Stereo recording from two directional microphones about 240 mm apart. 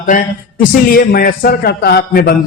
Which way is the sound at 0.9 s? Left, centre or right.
Left.